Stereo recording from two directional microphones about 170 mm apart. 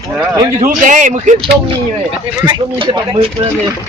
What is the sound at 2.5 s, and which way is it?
Speech, 30° right (ahead or behind).